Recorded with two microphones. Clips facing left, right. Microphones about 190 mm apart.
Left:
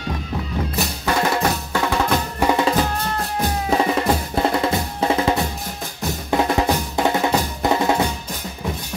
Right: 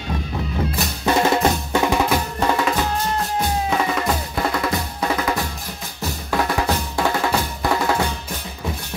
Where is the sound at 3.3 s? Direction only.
30° left (ahead or behind).